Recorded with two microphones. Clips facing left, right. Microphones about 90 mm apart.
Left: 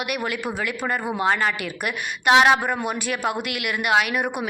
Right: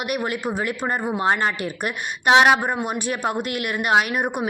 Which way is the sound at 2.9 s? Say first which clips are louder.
Right 1 dB; 35° right (ahead or behind).